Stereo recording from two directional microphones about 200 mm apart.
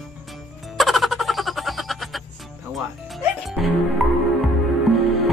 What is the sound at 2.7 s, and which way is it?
Music, centre (ahead or behind).